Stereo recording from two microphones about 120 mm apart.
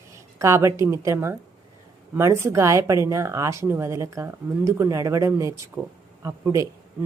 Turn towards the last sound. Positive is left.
turn(degrees=-25)  # may be behind; listen again after turning